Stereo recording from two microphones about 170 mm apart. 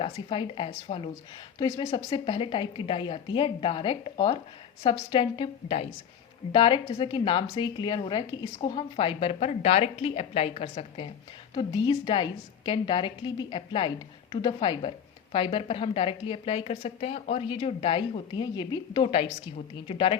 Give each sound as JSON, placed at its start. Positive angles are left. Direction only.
{"t": 0.0, "sound": "a woman's voice", "side_deg": 30}
{"t": 1.5, "sound": "a woman's voice", "side_deg": 20}